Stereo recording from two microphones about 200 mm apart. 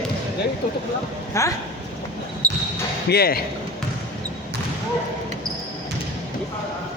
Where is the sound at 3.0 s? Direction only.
50° left (ahead or behind).